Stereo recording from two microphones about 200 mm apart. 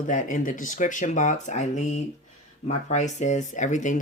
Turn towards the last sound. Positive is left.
turn(degrees=40)  # may be behind; listen again after turning